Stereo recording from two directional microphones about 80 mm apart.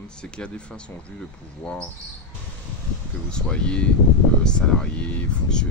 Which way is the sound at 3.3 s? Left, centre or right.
Centre.